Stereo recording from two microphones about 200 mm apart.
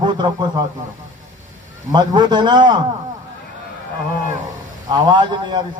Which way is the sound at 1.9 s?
20° right (ahead or behind).